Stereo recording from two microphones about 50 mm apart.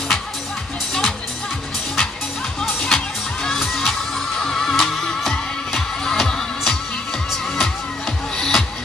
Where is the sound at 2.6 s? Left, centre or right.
Centre.